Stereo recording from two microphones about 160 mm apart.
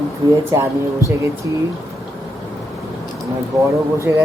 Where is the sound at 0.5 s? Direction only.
15° right (ahead or behind).